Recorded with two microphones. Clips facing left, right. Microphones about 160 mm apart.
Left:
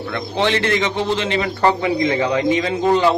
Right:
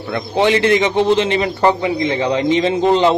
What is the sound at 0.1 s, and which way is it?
A man's voice, 15° right (ahead or behind).